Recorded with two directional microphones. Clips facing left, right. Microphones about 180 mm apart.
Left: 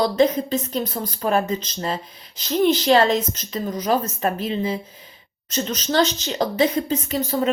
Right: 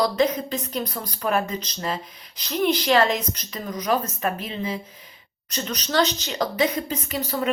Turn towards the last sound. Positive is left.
turn(degrees=30)  # may be behind; listen again after turning